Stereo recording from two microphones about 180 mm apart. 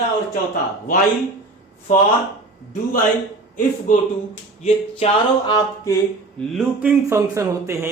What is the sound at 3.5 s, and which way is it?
Speech, 45° left (ahead or behind).